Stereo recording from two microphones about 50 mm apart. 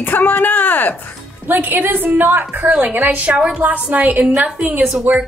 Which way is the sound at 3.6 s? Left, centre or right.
Right.